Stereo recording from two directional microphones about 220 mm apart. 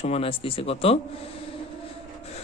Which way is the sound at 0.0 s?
25° left (ahead or behind).